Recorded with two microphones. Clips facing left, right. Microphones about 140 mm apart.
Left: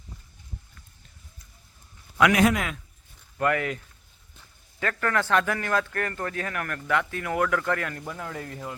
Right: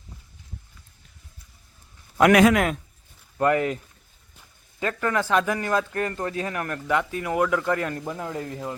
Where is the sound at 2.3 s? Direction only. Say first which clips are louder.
Right 8 dB; 80° right.